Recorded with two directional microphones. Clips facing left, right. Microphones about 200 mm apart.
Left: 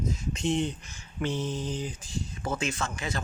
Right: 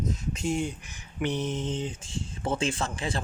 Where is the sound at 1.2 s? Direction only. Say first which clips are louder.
Right 1 dB; 20° right (ahead or behind).